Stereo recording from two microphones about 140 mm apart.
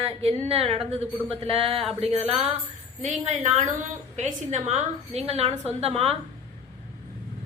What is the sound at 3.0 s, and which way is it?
A woman's voice, 60° right (ahead or behind).